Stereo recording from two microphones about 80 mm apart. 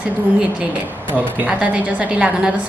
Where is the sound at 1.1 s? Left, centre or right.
Right.